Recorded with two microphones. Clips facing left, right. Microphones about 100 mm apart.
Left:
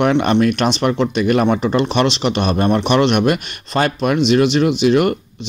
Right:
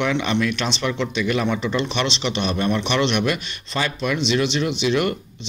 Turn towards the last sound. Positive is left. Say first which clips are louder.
# left 7 dB
turn(degrees=50)  # may be behind; listen again after turning